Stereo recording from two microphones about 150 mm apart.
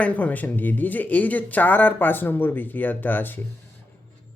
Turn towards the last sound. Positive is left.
turn(degrees=15)  # may be behind; listen again after turning